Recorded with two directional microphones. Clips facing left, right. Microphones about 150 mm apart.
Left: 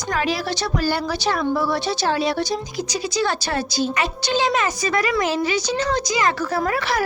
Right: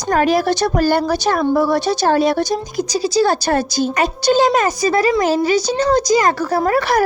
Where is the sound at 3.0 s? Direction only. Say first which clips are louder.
Right 8 dB; 35° right (ahead or behind).